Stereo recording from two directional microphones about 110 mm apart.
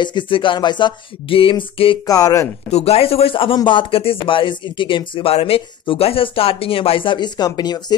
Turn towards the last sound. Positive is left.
turn(degrees=40)  # may be behind; listen again after turning